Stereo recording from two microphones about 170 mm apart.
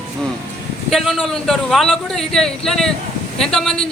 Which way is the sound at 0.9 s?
Centre (ahead or behind).